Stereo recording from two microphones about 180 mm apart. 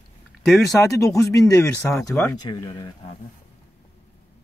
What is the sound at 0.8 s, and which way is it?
Speech, 15° left (ahead or behind).